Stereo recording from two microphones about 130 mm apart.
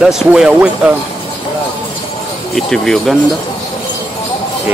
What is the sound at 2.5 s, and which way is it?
Speech, 5° left (ahead or behind).